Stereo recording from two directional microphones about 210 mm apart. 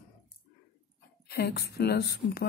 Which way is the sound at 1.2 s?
50° left (ahead or behind).